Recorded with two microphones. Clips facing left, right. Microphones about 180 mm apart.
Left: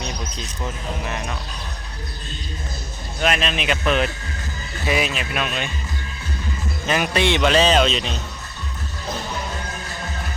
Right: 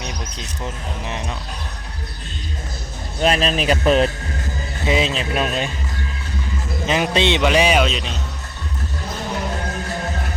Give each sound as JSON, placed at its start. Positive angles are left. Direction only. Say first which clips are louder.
{"t": 1.0, "sound": "speech", "louder": "right 2 dB", "side_deg": -25}
{"t": 3.2, "sound": "speech", "louder": "right 4 dB", "side_deg": -35}
{"t": 4.8, "sound": "speech", "louder": "right 3 dB", "side_deg": -25}
{"t": 6.8, "sound": "speech", "louder": "right 2 dB", "side_deg": -20}